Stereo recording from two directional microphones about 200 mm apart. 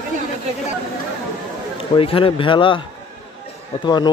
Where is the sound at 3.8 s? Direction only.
20° left (ahead or behind).